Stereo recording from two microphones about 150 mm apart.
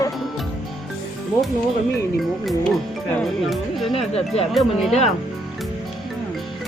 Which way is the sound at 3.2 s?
Centre (ahead or behind).